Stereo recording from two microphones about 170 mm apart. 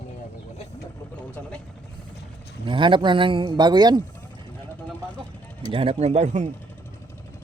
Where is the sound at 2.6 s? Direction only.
30° right (ahead or behind).